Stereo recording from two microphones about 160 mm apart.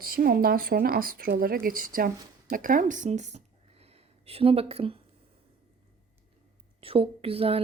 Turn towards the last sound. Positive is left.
turn(degrees=-35)  # may be behind; listen again after turning